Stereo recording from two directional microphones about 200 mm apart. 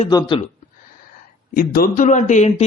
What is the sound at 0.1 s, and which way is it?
Speech, 20° left (ahead or behind).